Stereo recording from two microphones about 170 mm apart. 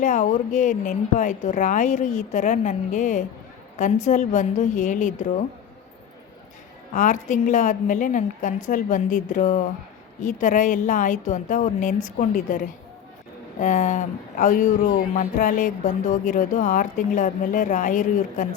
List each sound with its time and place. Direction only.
0.0 s speech: 45° left (ahead or behind)
6.9 s speech: 50° left (ahead or behind)